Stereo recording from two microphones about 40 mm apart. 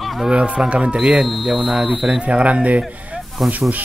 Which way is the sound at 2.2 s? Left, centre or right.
Right.